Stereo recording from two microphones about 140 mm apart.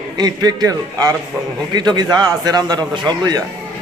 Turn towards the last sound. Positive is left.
turn(degrees=-30)  # may be behind; listen again after turning